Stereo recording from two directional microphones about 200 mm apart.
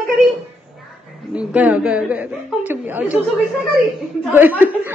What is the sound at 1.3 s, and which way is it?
A woman's voice, 5° right (ahead or behind).